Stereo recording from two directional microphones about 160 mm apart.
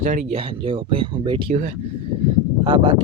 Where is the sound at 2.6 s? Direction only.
30° right (ahead or behind).